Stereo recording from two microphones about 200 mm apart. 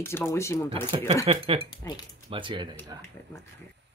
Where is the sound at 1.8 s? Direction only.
15° left (ahead or behind).